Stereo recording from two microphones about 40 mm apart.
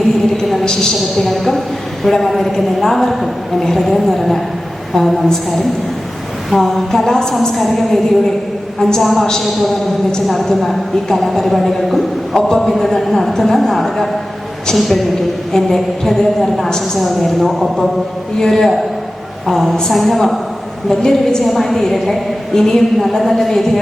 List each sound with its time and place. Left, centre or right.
0.6 s a woman's voice: centre
7.5 s a woman's voice: centre
12.4 s a woman's voice: centre
17.0 s a woman's voice: centre
21.4 s a woman's voice: centre